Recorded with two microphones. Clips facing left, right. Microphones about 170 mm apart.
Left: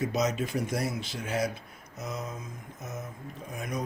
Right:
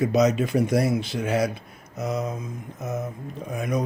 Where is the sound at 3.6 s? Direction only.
70° right (ahead or behind).